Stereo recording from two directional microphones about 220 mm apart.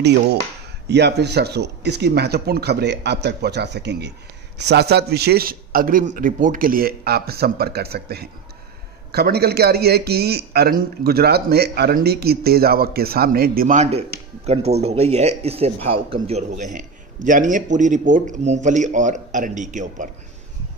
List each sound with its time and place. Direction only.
0.8 s a man's voice: 50° right (ahead or behind); by 20.1 s 35° right (ahead or behind)